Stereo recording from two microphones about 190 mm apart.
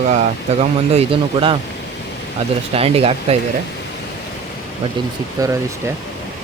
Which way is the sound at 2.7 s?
30° right (ahead or behind).